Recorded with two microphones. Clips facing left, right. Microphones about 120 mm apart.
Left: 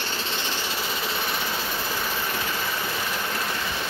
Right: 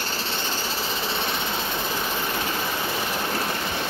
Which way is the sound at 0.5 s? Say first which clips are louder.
Right 1 dB; 30° right (ahead or behind).